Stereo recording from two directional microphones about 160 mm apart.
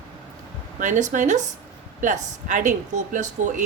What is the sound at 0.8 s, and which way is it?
Speech, 50° right (ahead or behind).